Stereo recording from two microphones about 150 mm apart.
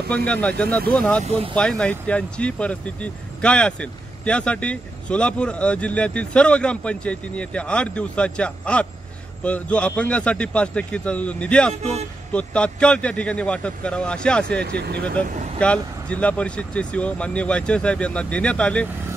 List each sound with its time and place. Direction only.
0.3 s speech: 10° left (ahead or behind)
1.2 s speech: 40° right (ahead or behind)
1.5 s speech: 5° left (ahead or behind)
11.8 s speech: 45° right (ahead or behind)
12.3 s speech: 10° left (ahead or behind)
14.8 s speech: 90° right
15.6 s speech: 10° left (ahead or behind)